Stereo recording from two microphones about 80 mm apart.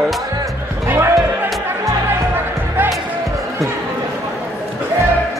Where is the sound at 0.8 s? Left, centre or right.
Right.